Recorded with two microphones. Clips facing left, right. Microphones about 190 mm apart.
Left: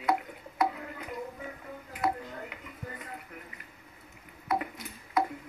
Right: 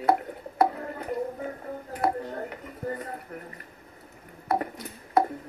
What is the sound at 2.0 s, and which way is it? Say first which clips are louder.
Speech: right 4 dB; 55° right (ahead or behind).